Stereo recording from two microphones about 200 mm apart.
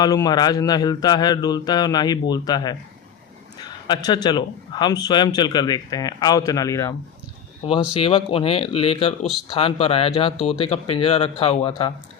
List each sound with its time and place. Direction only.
0.0 s speech: 20° left (ahead or behind)
7.6 s speech: 30° left (ahead or behind)